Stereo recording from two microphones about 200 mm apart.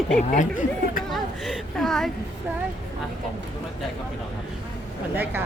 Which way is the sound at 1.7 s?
Centre (ahead or behind).